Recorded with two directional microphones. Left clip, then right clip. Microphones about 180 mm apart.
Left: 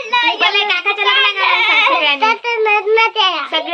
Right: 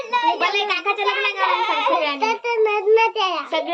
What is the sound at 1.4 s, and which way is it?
Speech, 30° right (ahead or behind).